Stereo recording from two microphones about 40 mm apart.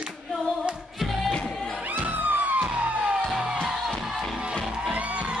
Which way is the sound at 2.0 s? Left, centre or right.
Right.